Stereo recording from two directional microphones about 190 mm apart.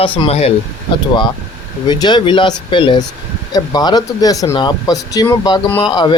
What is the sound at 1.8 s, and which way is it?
Speech, 20° left (ahead or behind).